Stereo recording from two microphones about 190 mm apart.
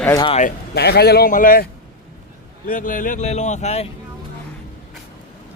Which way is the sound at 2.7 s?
45° left (ahead or behind).